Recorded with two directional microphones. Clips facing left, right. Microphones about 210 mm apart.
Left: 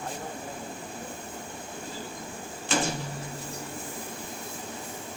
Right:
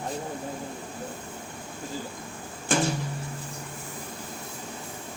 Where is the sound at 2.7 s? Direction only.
50° right (ahead or behind).